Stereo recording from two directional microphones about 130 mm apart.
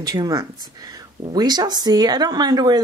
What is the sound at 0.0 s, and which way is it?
A woman's voice, 30° right (ahead or behind).